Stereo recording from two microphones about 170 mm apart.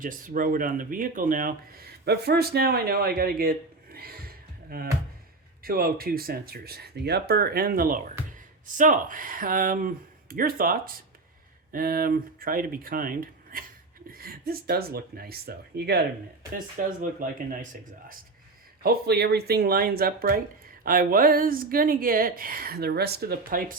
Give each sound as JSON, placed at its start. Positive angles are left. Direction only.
{"t": 0.0, "sound": "speech", "side_deg": -55}
{"t": 16.6, "sound": "speech", "side_deg": -55}
{"t": 18.8, "sound": "speech", "side_deg": -65}